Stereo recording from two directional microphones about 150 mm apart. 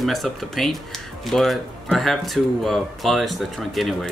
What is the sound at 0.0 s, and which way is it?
A man's voice, centre (ahead or behind).